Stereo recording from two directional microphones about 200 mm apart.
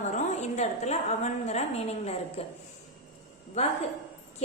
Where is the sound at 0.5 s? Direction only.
35° left (ahead or behind).